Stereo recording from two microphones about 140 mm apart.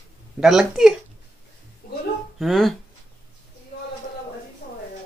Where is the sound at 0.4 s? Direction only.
Centre (ahead or behind).